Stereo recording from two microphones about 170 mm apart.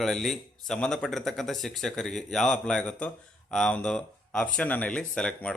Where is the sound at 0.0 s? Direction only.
Centre (ahead or behind).